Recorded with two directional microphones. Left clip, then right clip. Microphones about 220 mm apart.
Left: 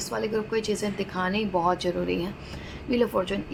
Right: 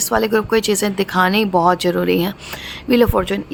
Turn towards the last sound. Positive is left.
turn(degrees=-35)  # may be behind; listen again after turning